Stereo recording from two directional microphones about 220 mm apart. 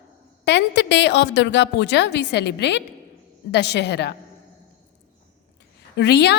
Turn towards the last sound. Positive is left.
turn(degrees=50)  # may be behind; listen again after turning